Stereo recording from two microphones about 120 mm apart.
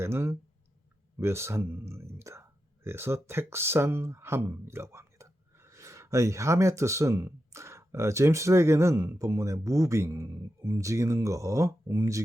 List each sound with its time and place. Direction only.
0.0 s speech: 20° right (ahead or behind)